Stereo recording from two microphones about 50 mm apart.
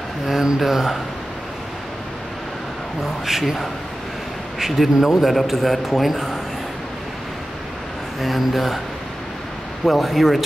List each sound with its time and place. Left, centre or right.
0.3 s speech: centre
3.3 s a man's voice: centre
8.2 s a man's voice: centre
9.8 s a man's voice: centre